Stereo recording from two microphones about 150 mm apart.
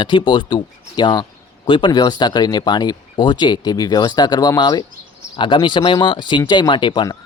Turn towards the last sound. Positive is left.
turn(degrees=30)  # may be behind; listen again after turning